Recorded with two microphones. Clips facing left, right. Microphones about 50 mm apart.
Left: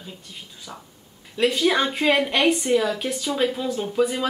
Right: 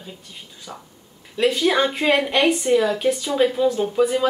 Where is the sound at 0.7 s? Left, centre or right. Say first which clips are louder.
Right 3 dB; centre.